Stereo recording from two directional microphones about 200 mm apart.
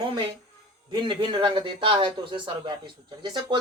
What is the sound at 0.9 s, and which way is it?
Speech, 25° right (ahead or behind).